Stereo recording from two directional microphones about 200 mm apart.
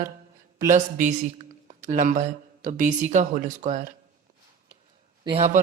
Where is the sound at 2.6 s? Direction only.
40° right (ahead or behind).